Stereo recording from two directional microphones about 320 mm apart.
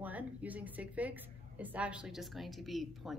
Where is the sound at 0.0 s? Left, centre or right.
Centre.